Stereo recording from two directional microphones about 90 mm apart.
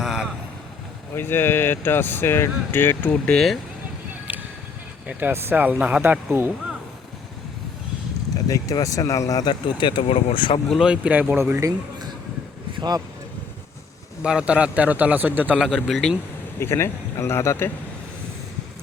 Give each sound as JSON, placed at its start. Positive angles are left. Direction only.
{"t": 0.0, "sound": "vehicle", "side_deg": -5}
{"t": 1.1, "sound": "speech", "side_deg": 25}
{"t": 5.3, "sound": "speech", "side_deg": -25}
{"t": 8.4, "sound": "speech", "side_deg": 40}
{"t": 10.7, "sound": "a man's voice", "side_deg": -10}
{"t": 11.5, "sound": "speech", "side_deg": -40}
{"t": 14.2, "sound": "a man's voice", "side_deg": -10}
{"t": 15.5, "sound": "speech", "side_deg": -5}
{"t": 16.6, "sound": "speech", "side_deg": 30}